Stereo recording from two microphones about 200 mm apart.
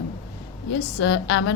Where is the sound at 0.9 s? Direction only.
65° left (ahead or behind).